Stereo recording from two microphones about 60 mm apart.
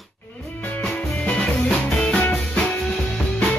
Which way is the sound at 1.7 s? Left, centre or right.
Centre.